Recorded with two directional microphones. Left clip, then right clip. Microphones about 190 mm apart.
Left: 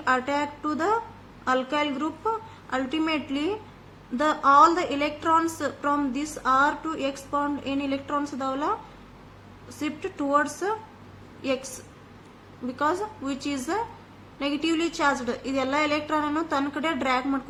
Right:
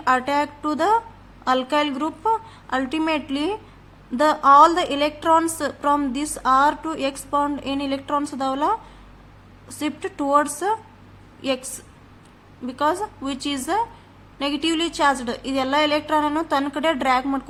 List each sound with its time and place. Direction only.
0.0 s a woman's voice: 45° right (ahead or behind)
9.8 s a woman's voice: 45° right (ahead or behind)